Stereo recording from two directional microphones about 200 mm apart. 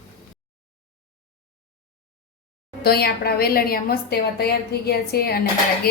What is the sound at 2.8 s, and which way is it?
A woman's voice, 50° left (ahead or behind).